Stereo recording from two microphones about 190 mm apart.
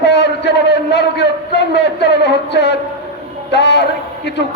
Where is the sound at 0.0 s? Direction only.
65° left (ahead or behind).